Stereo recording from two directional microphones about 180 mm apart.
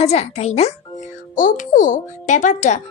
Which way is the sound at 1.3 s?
45° left (ahead or behind).